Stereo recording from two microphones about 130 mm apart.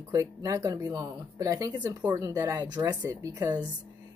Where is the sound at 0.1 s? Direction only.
25° right (ahead or behind).